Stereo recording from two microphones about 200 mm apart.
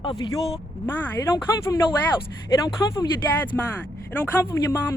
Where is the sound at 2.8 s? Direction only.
15° left (ahead or behind).